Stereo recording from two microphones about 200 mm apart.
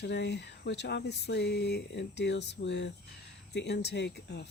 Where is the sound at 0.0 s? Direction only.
60° left (ahead or behind).